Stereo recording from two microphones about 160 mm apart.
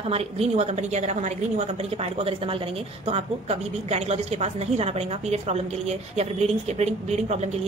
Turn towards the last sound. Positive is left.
turn(degrees=-45)  # may be behind; listen again after turning